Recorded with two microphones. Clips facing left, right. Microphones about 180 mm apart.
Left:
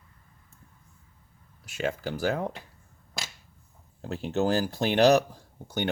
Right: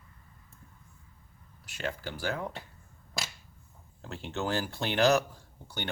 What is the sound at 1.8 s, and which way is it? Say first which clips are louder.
Speech: left 6 dB; 45° left (ahead or behind).